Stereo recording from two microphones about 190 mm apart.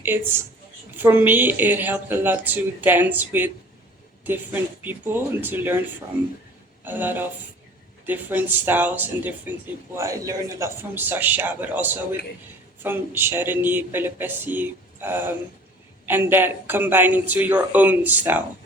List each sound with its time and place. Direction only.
0.0 s speech: 10° right (ahead or behind)
4.8 s speech: 10° right (ahead or behind)